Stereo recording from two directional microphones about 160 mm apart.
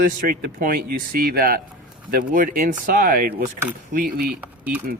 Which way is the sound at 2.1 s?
60° right (ahead or behind).